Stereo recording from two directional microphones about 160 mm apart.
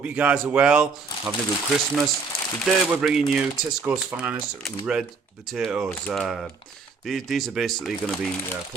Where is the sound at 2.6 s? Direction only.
Centre (ahead or behind).